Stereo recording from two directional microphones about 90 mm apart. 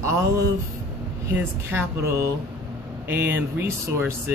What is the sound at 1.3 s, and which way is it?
Speech, 25° right (ahead or behind).